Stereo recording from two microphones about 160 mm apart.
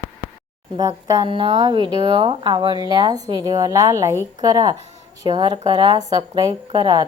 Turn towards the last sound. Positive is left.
turn(degrees=-25)  # may be behind; listen again after turning